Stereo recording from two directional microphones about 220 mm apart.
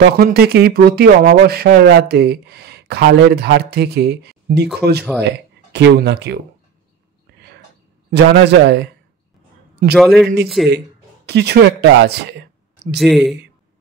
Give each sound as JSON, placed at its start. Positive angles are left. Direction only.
{"t": 0.0, "sound": "speech", "side_deg": -45}
{"t": 8.1, "sound": "speech", "side_deg": -50}
{"t": 9.9, "sound": "speech", "side_deg": 0}
{"t": 11.2, "sound": "speech", "side_deg": -50}
{"t": 12.9, "sound": "speech", "side_deg": 0}